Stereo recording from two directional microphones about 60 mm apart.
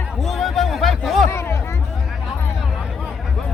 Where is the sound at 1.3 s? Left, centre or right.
Left.